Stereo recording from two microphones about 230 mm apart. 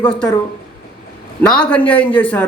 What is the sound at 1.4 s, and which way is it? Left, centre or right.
Speech, centre.